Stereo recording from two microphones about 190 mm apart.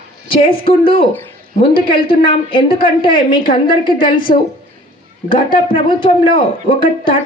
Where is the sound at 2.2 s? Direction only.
25° left (ahead or behind).